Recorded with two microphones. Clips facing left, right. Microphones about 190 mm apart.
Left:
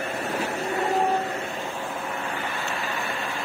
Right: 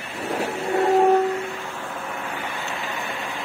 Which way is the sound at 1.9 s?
5° left (ahead or behind).